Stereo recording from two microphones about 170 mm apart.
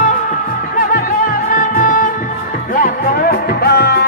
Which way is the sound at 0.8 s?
55° left (ahead or behind).